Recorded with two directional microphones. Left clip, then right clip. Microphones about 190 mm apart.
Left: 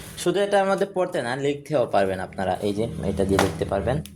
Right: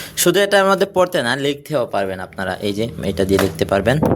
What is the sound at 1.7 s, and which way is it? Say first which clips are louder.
Speech: left 1 dB; 15° right (ahead or behind).